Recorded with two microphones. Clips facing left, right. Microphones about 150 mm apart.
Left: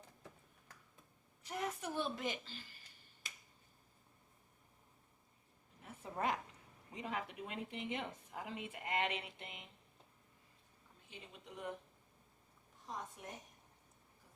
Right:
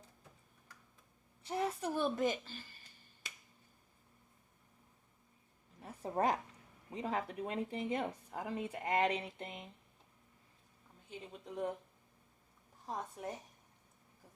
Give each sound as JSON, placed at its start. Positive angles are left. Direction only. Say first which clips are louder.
{"t": 1.5, "sound": "a woman's voice", "louder": "right 5 dB", "side_deg": -30}
{"t": 5.8, "sound": "a sound", "louder": "right 6 dB", "side_deg": -35}
{"t": 6.9, "sound": "a woman's voice", "louder": "right 5 dB", "side_deg": -35}
{"t": 11.3, "sound": "a woman's voice", "louder": "right 8 dB", "side_deg": -35}
{"t": 12.8, "sound": "a woman's voice", "louder": "right 6 dB", "side_deg": -35}